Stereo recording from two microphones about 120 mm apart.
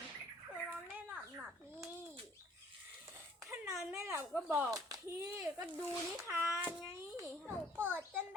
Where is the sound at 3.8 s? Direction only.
20° right (ahead or behind).